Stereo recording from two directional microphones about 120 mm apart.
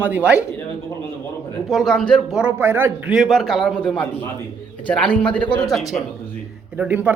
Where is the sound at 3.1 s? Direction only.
Centre (ahead or behind).